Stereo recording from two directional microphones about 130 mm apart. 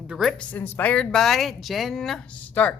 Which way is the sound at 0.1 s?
Centre (ahead or behind).